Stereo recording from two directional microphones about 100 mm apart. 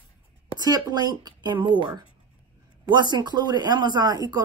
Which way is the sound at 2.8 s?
45° right (ahead or behind).